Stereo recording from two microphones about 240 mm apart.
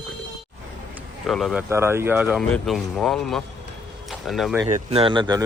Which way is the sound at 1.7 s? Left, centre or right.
Centre.